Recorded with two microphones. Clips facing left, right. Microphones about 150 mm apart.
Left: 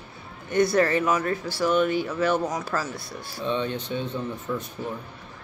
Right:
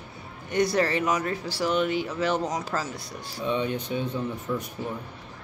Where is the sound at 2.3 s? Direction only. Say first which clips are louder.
Left 2 dB; 20° right (ahead or behind).